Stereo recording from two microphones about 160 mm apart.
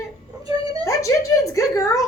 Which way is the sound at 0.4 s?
25° right (ahead or behind).